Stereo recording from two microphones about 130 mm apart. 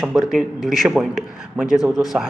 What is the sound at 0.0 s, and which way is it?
Speech, centre (ahead or behind).